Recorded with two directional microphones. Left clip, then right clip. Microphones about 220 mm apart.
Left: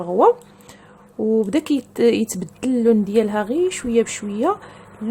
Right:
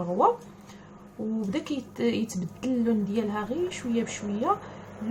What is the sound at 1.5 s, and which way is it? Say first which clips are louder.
A woman's voice: left 11 dB; 50° left (ahead or behind).